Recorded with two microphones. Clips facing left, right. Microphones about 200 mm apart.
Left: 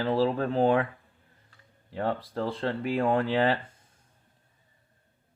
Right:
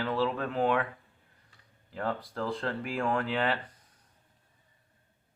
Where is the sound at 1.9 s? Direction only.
30° left (ahead or behind).